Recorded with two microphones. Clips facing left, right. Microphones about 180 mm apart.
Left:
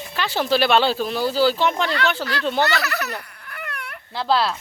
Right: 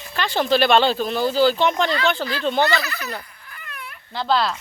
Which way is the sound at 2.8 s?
70° left (ahead or behind).